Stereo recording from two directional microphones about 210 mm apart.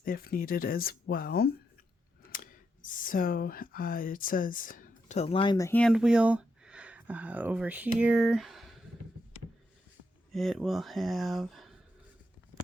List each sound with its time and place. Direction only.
0.0 s speech: 45° left (ahead or behind); by 5.9 s 10° left (ahead or behind)
5.9 s speech: 5° right (ahead or behind)
10.3 s speech: centre (ahead or behind)